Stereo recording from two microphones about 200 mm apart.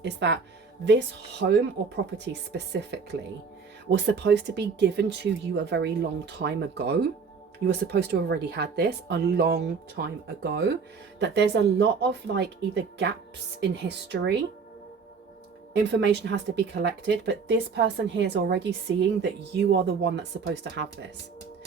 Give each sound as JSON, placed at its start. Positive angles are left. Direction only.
{"t": 0.0, "sound": "speech", "side_deg": -60}
{"t": 3.8, "sound": "speech", "side_deg": -60}
{"t": 15.7, "sound": "speech", "side_deg": -60}